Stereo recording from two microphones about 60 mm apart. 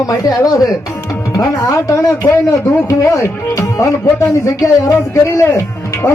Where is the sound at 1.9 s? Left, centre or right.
Left.